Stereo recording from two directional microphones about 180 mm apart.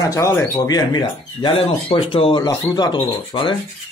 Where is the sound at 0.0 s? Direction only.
15° left (ahead or behind).